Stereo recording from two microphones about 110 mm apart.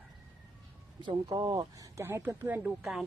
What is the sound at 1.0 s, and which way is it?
Speech, 40° right (ahead or behind).